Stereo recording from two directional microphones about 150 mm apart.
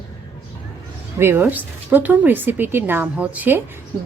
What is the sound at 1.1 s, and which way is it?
A woman's voice, 15° right (ahead or behind).